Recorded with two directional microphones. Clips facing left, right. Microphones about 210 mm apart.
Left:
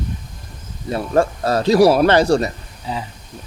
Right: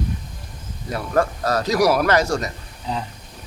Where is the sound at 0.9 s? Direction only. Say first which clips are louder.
Left 3 dB; 25° left (ahead or behind).